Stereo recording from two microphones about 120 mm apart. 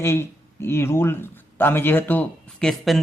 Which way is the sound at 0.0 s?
20° left (ahead or behind).